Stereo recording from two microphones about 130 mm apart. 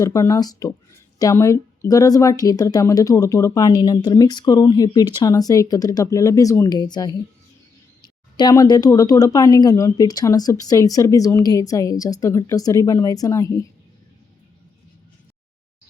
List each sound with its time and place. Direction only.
0.0 s speech: 25° left (ahead or behind)
8.4 s speech: 30° left (ahead or behind)